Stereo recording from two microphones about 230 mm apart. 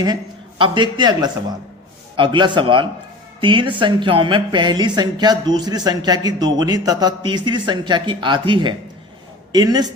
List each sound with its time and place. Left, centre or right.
0.6 s a man's voice: centre